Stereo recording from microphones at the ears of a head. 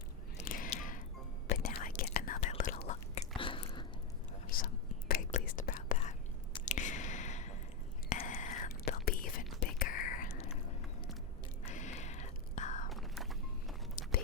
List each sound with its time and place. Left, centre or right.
0.4 s a sound: left
1.5 s whispering: left
4.4 s whispering: left
6.7 s squish: left
8.1 s whispering: left
11.6 s whispering: left